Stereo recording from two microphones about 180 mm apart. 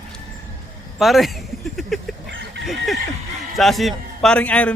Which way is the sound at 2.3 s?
90° right.